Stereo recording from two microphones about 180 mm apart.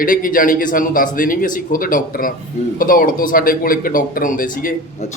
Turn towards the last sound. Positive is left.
turn(degrees=50)  # may be behind; listen again after turning